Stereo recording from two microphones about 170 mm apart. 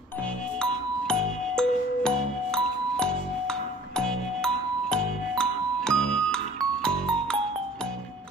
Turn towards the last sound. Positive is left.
turn(degrees=5)  # may be behind; listen again after turning